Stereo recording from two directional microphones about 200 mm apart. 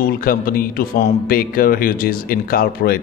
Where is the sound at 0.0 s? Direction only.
45° left (ahead or behind).